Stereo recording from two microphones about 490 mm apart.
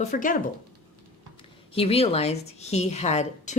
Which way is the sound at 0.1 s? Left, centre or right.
Centre.